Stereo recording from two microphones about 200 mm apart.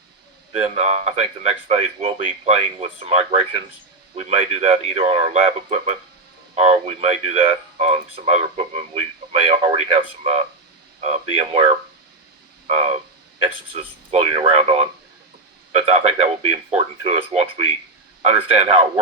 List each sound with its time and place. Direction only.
0.5 s speech: 30° right (ahead or behind)
11.0 s speech: 30° right (ahead or behind)